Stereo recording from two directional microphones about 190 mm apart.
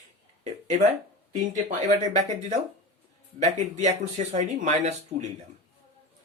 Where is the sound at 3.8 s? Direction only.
35° right (ahead or behind).